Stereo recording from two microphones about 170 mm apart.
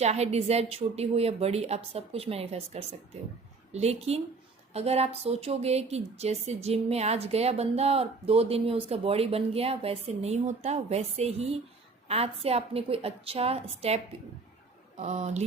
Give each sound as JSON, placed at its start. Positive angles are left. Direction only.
{"t": 0.0, "sound": "speech", "side_deg": -40}